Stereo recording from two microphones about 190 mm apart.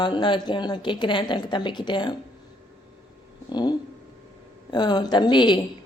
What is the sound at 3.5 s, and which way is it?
A woman's voice, 20° left (ahead or behind).